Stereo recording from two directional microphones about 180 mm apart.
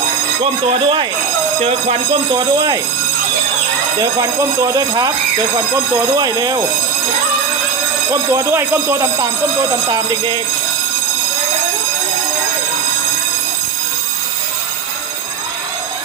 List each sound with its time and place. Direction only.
0.7 s speech: 30° right (ahead or behind)
3.9 s speech: 20° right (ahead or behind)
6.1 s speech: 20° right (ahead or behind)
8.1 s speech: 15° right (ahead or behind)